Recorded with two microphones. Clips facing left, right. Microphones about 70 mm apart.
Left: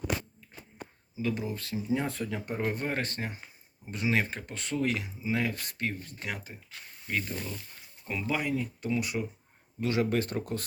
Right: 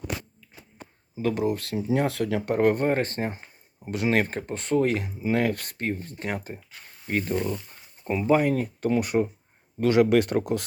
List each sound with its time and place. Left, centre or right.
1.1 s speech: right
2.6 s speech: right
2.8 s speech: right
3.8 s speech: right
5.7 s speech: right
8.0 s speech: right
8.4 s speech: right
9.8 s speech: right